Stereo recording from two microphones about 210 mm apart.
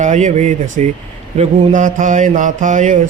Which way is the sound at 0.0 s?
35° right (ahead or behind).